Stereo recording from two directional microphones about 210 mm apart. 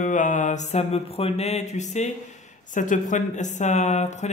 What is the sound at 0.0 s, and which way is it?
Speech, 35° left (ahead or behind).